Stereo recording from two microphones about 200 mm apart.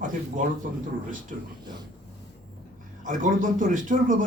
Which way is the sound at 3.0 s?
40° right (ahead or behind).